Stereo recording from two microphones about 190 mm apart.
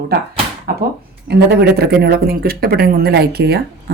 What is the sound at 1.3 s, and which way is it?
Speech, 60° right (ahead or behind).